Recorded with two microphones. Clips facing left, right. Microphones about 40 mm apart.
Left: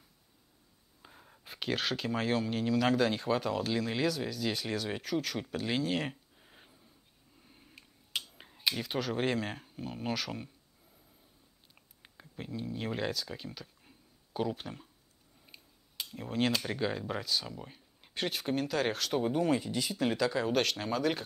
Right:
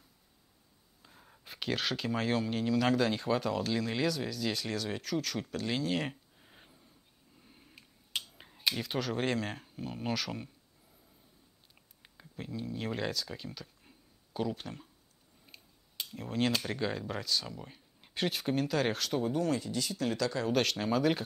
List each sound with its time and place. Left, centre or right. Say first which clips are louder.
1.2 s speech: even; centre
12.0 s speech: even; centre
19.1 s speech: left 3 dB; centre